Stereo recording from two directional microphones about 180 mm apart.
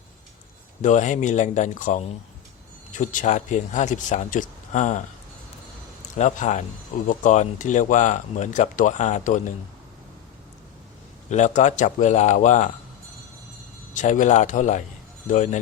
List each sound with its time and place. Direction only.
0.8 s speech: 45° left (ahead or behind)
6.1 s a man's voice: 40° left (ahead or behind)
11.3 s speech: 40° left (ahead or behind)
13.9 s speech: 45° left (ahead or behind)